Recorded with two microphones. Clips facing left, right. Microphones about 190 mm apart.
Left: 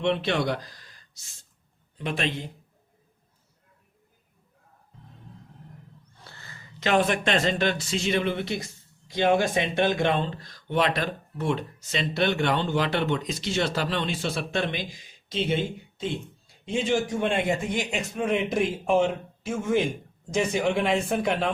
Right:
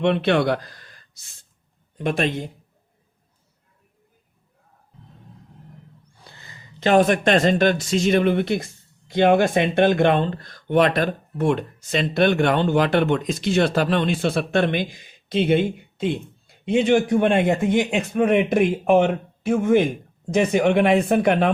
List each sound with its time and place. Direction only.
0.0 s speech: 60° right (ahead or behind)
2.0 s speech: 45° right (ahead or behind)
6.1 s a sound: 15° right (ahead or behind)
6.7 s speech: 40° right (ahead or behind); by 21.5 s 60° right (ahead or behind)